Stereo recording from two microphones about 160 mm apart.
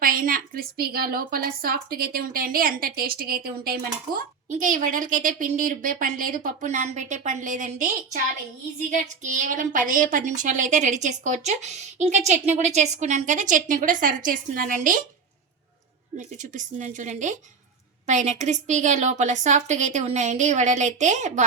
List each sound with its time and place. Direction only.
0.0 s a woman's voice: 60° right (ahead or behind)
4.4 s a woman's voice: 50° right (ahead or behind)
9.2 s a woman's voice: 50° right (ahead or behind)
16.1 s a woman's voice: 50° right (ahead or behind)